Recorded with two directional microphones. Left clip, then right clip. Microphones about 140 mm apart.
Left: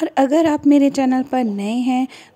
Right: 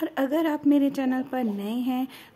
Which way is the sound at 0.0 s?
40° left (ahead or behind).